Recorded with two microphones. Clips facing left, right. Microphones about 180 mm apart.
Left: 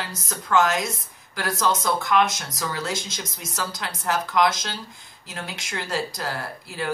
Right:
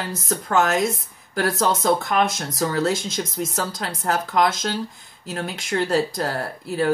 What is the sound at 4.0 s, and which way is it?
Speech, 40° right (ahead or behind).